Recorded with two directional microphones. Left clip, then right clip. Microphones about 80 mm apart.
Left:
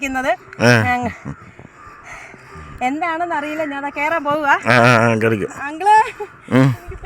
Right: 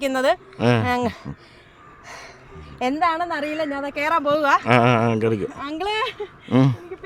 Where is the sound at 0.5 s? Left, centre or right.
Left.